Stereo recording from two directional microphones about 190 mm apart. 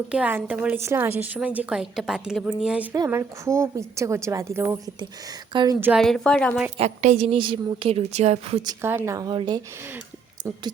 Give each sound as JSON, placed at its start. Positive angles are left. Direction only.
{"t": 0.1, "sound": "a woman's voice", "side_deg": -10}
{"t": 5.8, "sound": "a woman's voice", "side_deg": 0}
{"t": 6.7, "sound": "a woman's voice", "side_deg": -35}
{"t": 8.6, "sound": "a woman's voice", "side_deg": -10}